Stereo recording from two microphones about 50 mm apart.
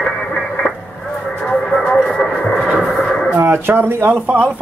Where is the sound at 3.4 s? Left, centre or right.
Right.